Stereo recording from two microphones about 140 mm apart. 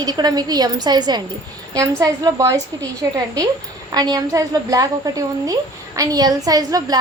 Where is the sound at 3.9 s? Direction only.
30° right (ahead or behind).